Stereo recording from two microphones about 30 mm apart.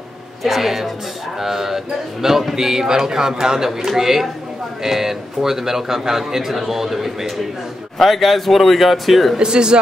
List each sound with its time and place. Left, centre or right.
0.4 s a man's voice: centre
9.4 s speech: right